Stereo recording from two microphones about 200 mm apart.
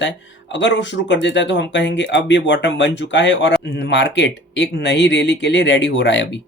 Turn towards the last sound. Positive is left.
turn(degrees=60)  # may be behind; listen again after turning